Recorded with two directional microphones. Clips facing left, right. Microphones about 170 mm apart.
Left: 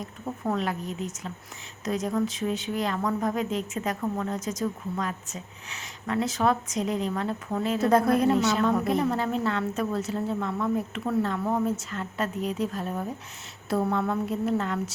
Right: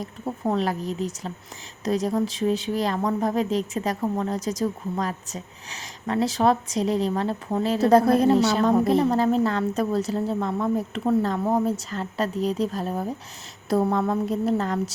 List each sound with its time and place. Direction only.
0.0 s speech: 30° right (ahead or behind)